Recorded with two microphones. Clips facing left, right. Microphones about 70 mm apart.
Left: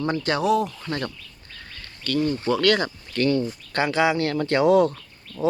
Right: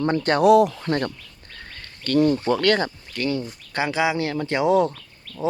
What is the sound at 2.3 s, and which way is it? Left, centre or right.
Speech, right.